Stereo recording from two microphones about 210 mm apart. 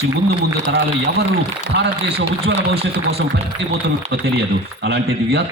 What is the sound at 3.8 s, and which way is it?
A man's voice, 55° right (ahead or behind).